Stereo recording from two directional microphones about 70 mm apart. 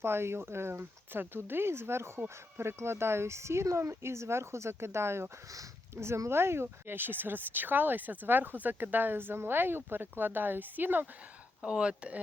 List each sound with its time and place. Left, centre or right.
0.0 s speech: right
11.6 s speech: centre